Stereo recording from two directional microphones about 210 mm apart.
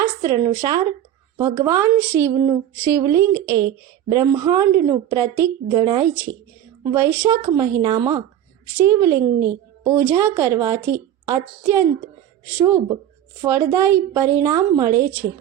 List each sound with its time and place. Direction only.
0.2 s a woman's voice: 15° right (ahead or behind)